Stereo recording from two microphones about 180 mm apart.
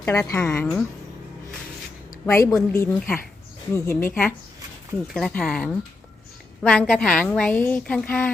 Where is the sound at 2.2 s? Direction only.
15° left (ahead or behind).